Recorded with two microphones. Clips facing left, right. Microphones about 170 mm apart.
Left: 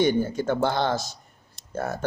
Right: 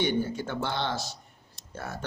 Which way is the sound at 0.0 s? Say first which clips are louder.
Left 6 dB; 45° left (ahead or behind).